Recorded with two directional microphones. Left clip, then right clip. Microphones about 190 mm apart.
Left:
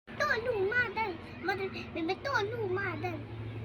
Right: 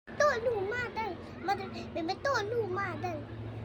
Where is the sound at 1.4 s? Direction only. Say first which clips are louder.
Right 1 dB; 65° right (ahead or behind).